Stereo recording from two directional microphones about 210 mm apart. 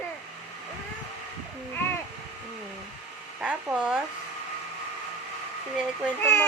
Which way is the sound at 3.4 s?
5° right (ahead or behind).